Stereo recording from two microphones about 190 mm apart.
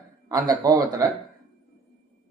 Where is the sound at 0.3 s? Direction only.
20° right (ahead or behind).